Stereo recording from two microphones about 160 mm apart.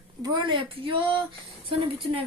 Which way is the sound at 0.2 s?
30° right (ahead or behind).